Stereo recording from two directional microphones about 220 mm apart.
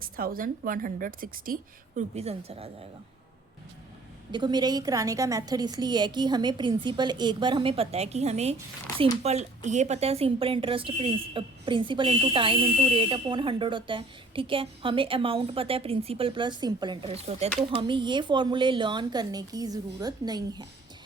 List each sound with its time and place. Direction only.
0.0 s a woman's voice: 40° right (ahead or behind)
2.0 s speech: 30° right (ahead or behind)
4.3 s speech: 20° right (ahead or behind)